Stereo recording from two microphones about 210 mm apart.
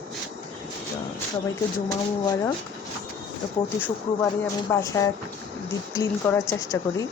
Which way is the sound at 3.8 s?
10° left (ahead or behind).